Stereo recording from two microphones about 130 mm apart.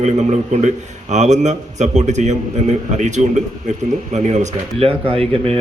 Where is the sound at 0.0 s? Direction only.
60° right (ahead or behind).